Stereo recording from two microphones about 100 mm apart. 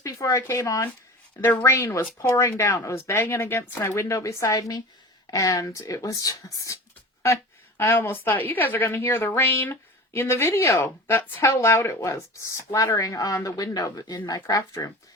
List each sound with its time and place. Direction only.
0.0 s a woman's voice: 35° left (ahead or behind)
7.8 s a woman's voice: 20° left (ahead or behind)